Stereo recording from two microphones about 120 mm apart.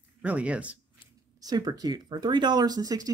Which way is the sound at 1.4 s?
30° right (ahead or behind).